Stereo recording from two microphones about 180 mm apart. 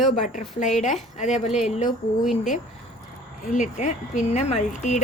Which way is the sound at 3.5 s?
45° left (ahead or behind).